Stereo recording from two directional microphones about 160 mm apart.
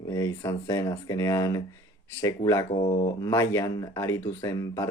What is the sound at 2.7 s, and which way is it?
Speech, 40° left (ahead or behind).